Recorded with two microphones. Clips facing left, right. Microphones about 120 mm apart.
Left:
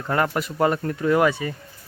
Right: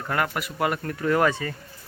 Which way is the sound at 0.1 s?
30° left (ahead or behind).